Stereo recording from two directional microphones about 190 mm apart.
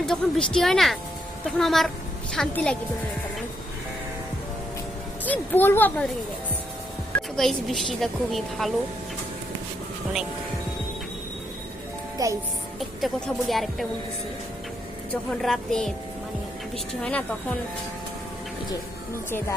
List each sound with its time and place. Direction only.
0.0 s speech: 5° left (ahead or behind)
5.2 s speech: 10° left (ahead or behind)
7.2 s speech: centre (ahead or behind)
12.1 s a child's voice: 15° right (ahead or behind)
12.8 s speech: centre (ahead or behind)
15.1 s speech: 5° left (ahead or behind)
19.1 s speech: 15° left (ahead or behind)